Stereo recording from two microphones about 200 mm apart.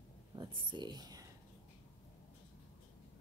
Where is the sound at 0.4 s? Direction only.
25° right (ahead or behind).